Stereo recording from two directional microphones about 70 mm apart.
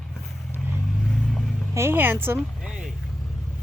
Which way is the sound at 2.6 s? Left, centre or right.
Centre.